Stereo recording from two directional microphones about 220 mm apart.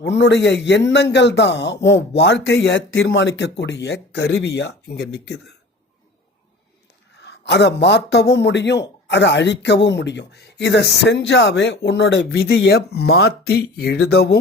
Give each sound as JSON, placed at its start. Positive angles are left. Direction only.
{"t": 0.0, "sound": "a man's voice", "side_deg": 50}
{"t": 7.2, "sound": "a man's voice", "side_deg": 50}